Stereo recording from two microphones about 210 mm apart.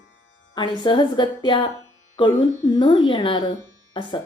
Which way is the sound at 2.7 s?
20° left (ahead or behind).